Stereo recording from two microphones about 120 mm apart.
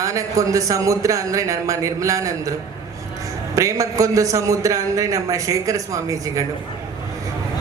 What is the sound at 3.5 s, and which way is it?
A man's voice, 30° right (ahead or behind).